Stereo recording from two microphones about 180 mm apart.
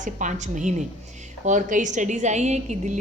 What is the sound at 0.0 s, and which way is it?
A woman's voice, 45° right (ahead or behind).